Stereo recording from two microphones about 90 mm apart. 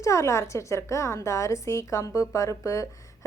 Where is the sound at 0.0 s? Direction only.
35° left (ahead or behind).